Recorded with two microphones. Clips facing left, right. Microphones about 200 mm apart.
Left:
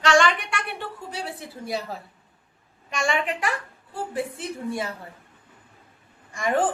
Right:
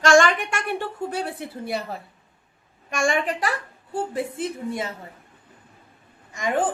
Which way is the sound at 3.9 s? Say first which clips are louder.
Right 3 dB; 25° right (ahead or behind).